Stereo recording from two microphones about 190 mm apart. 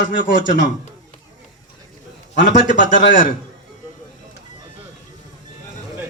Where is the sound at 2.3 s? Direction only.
45° left (ahead or behind).